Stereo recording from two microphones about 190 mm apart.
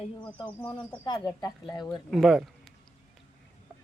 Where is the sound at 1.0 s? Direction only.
20° left (ahead or behind).